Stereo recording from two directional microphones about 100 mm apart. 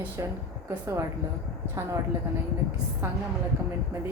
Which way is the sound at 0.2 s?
30° right (ahead or behind).